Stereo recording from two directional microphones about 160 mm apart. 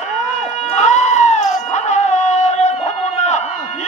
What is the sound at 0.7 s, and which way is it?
Cat, 45° left (ahead or behind).